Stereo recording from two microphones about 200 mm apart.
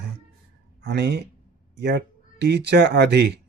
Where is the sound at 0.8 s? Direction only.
55° right (ahead or behind).